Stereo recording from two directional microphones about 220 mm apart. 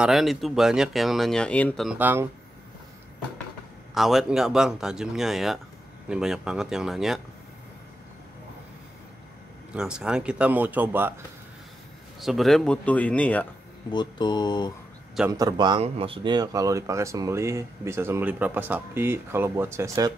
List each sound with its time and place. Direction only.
0.0 s speech: centre (ahead or behind)
3.9 s speech: centre (ahead or behind)
9.8 s speech: 5° right (ahead or behind)
12.2 s speech: centre (ahead or behind)
13.9 s mantra: 20° left (ahead or behind)
15.3 s speech: 20° right (ahead or behind)